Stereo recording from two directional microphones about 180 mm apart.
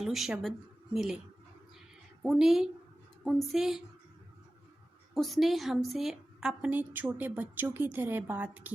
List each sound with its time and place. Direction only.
0.0 s a woman's voice: centre (ahead or behind)
2.2 s a woman's voice: centre (ahead or behind)
5.1 s a woman's voice: centre (ahead or behind)